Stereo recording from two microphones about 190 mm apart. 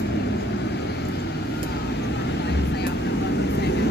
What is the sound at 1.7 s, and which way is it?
Vehicle, 65° left (ahead or behind).